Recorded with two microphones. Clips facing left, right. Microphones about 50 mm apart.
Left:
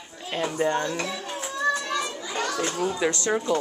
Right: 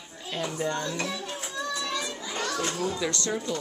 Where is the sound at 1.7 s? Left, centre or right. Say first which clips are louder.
Left 4 dB; left.